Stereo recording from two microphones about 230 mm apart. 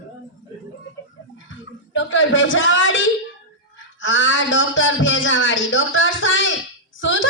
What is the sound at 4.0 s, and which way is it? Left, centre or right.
A man's voice, left.